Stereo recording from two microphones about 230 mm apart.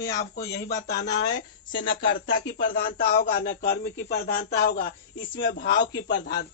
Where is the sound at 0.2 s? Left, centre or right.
Left.